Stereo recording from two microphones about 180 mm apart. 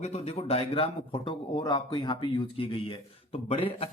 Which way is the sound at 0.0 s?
35° left (ahead or behind).